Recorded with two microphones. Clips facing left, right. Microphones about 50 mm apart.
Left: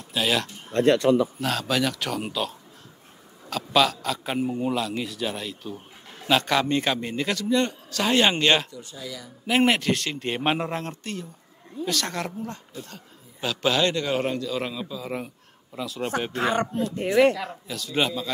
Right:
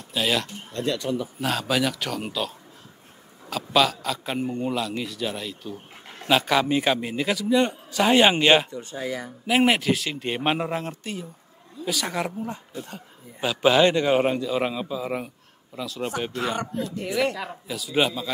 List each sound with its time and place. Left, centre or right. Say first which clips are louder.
0.1 s speech: even; centre
0.7 s speech: left 8 dB; left
1.4 s a man's voice: right 1 dB; centre
8.6 s speech: right 7 dB; right
9.5 s a man's voice: right 1 dB; centre; by 15.0 s right
15.0 s speech: right 2 dB; centre
16.9 s speech: left 7 dB; left
17.4 s a man's voice: even; centre